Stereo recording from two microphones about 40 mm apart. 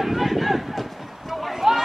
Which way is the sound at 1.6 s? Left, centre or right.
Centre.